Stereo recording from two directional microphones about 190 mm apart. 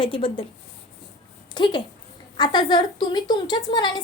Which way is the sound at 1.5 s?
25° left (ahead or behind).